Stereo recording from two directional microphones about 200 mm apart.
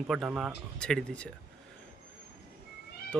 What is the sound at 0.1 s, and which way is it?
Speech, centre (ahead or behind).